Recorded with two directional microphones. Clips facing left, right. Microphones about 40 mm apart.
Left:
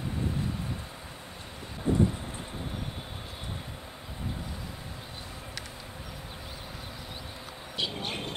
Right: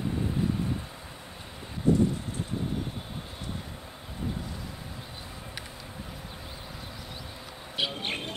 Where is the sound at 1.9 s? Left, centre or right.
Left.